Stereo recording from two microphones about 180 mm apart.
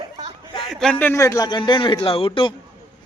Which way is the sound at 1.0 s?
15° left (ahead or behind).